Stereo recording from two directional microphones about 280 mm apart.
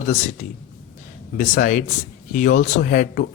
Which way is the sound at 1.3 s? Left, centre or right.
Left.